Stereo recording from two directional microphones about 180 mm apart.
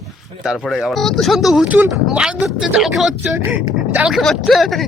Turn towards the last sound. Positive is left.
turn(degrees=0)  # may be behind; listen again after turning